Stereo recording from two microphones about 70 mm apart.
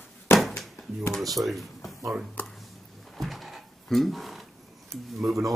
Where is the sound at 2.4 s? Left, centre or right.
Left.